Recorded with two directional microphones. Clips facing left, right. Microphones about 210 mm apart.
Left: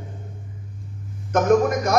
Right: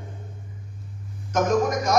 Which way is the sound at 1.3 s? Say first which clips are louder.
Left 4 dB; 55° left (ahead or behind).